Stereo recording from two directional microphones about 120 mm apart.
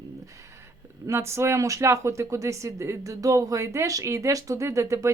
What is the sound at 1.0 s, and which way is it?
Speech, 25° right (ahead or behind).